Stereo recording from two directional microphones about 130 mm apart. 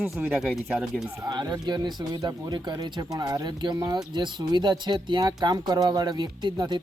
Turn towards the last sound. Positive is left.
turn(degrees=-35)  # may be behind; listen again after turning